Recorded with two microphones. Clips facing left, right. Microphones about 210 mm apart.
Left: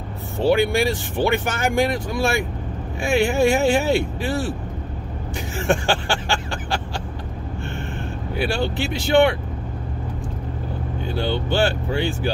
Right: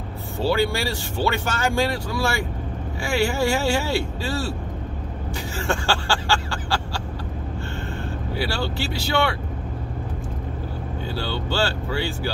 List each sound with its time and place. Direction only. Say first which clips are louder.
0.4 s speech: left 4 dB; 20° left (ahead or behind)
5.3 s vehicle: left 5 dB; 20° left (ahead or behind)
8.4 s speech: left 4 dB; 20° left (ahead or behind)
11.1 s speech: left 4 dB; 20° left (ahead or behind)